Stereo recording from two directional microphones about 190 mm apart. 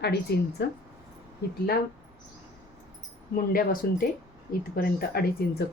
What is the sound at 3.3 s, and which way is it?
Speech, 45° left (ahead or behind).